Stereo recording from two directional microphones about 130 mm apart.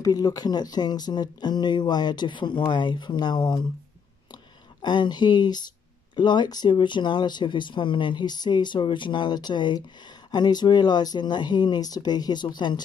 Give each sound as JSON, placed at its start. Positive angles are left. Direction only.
{"t": 0.0, "sound": "speech", "side_deg": 30}
{"t": 4.8, "sound": "speech", "side_deg": 35}